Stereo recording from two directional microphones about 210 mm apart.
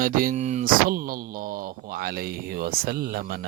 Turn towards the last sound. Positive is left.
turn(degrees=-45)  # may be behind; listen again after turning